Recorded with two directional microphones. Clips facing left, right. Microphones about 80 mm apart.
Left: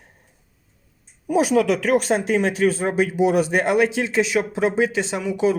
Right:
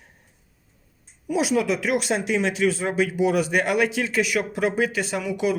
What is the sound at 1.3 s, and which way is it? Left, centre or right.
Speech, left.